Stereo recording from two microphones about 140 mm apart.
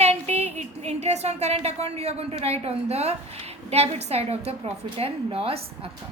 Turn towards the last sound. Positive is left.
turn(degrees=-45)  # may be behind; listen again after turning